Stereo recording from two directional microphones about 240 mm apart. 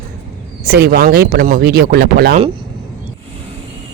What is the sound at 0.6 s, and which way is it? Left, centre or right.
Speech, right.